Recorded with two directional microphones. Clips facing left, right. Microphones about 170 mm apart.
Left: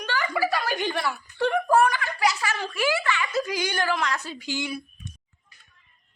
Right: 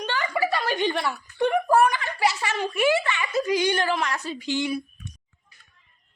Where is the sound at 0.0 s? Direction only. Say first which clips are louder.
Right 1 dB; 20° right (ahead or behind).